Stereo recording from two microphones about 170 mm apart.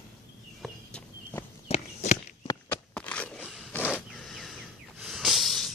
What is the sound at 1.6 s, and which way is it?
Walk, 40° left (ahead or behind).